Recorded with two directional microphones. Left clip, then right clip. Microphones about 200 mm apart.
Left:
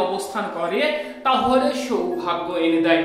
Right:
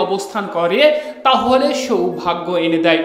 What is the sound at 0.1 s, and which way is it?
Speech, 40° right (ahead or behind).